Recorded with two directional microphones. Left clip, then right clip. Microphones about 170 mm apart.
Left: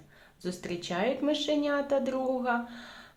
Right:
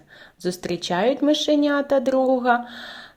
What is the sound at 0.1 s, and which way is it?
Speech, 40° right (ahead or behind).